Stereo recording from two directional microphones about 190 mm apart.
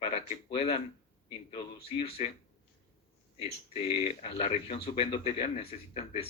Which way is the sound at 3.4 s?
35° left (ahead or behind).